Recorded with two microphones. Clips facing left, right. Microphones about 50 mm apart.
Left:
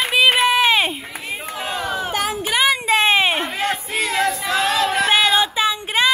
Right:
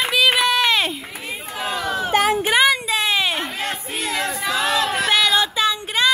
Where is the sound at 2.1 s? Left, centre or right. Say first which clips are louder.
Right 9 dB; right.